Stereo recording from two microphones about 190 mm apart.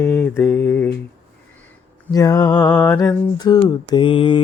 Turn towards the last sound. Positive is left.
turn(degrees=25)  # may be behind; listen again after turning